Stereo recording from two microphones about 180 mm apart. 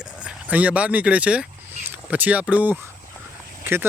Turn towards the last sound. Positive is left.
turn(degrees=-10)  # may be behind; listen again after turning